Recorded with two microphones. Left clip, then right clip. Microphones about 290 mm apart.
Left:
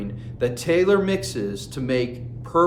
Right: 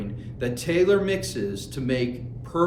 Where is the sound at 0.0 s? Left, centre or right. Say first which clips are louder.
Left 5 dB; centre.